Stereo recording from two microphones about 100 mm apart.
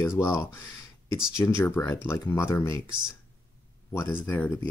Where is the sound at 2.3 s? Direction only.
30° left (ahead or behind).